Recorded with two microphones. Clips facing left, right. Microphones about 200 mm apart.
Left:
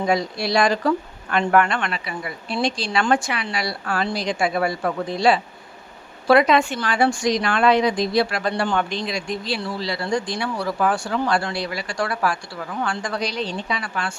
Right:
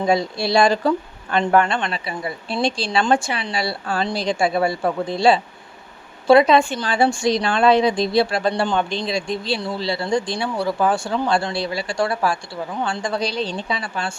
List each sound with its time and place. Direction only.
0.0 s speech: 25° right (ahead or behind)